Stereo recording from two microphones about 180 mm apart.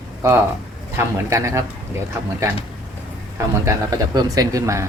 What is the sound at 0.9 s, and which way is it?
Speech, 15° right (ahead or behind).